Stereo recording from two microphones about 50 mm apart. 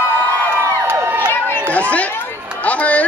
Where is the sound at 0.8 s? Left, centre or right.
Right.